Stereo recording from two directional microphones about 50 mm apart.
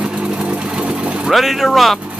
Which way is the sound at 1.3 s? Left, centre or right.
Centre.